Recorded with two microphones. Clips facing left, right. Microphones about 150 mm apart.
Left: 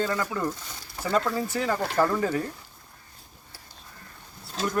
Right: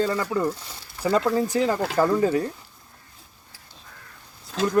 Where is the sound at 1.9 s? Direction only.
15° right (ahead or behind).